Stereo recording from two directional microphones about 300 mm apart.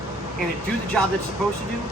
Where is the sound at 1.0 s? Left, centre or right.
Centre.